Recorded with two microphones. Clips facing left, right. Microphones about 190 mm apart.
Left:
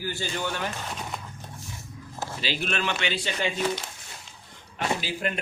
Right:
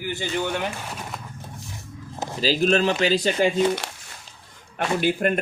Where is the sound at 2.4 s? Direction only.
35° right (ahead or behind).